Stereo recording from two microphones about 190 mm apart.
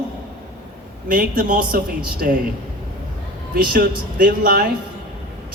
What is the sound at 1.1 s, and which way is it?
Speech, 45° right (ahead or behind).